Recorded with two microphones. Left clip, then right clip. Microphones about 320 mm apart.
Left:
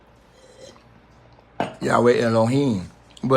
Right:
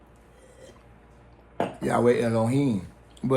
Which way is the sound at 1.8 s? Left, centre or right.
Left.